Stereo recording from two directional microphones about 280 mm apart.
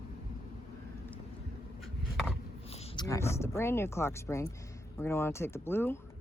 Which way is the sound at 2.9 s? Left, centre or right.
Centre.